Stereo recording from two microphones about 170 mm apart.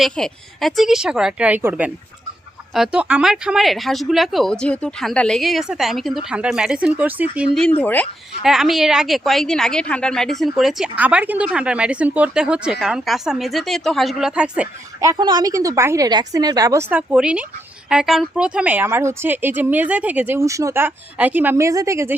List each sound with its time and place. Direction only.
0.0 s speech: centre (ahead or behind)
7.8 s speech: 10° left (ahead or behind)
8.4 s speech: centre (ahead or behind)
15.0 s a woman's voice: 25° right (ahead or behind)
16.9 s speech: 10° right (ahead or behind)